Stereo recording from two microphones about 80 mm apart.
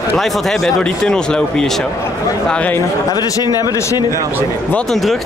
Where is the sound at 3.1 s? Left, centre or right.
Left.